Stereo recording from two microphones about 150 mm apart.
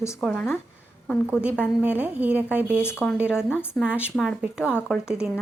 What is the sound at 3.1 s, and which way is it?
Speech, 5° right (ahead or behind).